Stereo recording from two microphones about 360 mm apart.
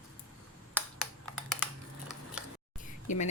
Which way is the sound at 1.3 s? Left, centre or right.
Centre.